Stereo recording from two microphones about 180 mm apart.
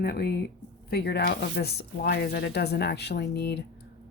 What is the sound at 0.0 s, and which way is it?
Speech, 60° left (ahead or behind).